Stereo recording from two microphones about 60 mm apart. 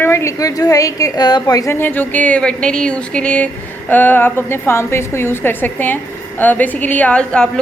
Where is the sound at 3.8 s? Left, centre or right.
Left; by 7.6 s centre.